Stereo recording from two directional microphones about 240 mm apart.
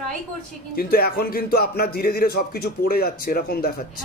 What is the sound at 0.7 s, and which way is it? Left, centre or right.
A man's voice, left.